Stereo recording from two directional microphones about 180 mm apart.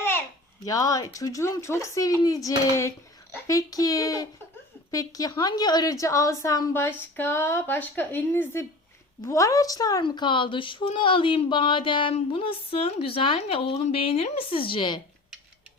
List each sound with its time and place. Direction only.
0.6 s a woman's voice: 20° left (ahead or behind)